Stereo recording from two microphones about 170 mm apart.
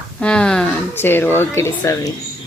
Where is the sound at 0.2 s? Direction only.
5° left (ahead or behind).